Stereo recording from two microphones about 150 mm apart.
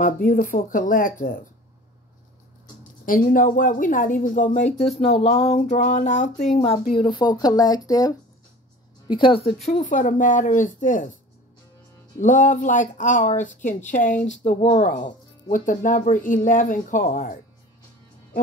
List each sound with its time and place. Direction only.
0.0 s speech: 65° left (ahead or behind)
3.1 s speech: 65° left (ahead or behind)
6.9 s speech: 30° left (ahead or behind)
9.0 s speech: 35° left (ahead or behind)
9.7 s speech: 60° left (ahead or behind)
12.2 s speech: 55° left (ahead or behind)